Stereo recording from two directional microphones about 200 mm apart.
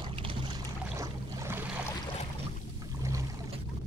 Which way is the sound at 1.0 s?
10° right (ahead or behind).